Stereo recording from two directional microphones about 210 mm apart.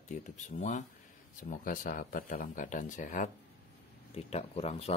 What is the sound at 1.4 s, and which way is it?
Speech, 40° left (ahead or behind).